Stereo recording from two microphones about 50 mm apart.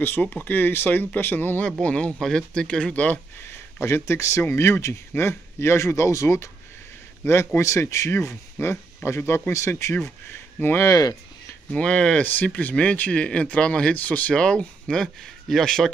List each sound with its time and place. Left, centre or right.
0.2 s speech: left
1.8 s speech: left
2.1 s speech: centre; by 3.2 s left
3.8 s speech: left
7.2 s speech: left
8.5 s speech: left
9.5 s speech: left
10.6 s speech: left
11.7 s speech: left
12.2 s speech: left
14.3 s speech: centre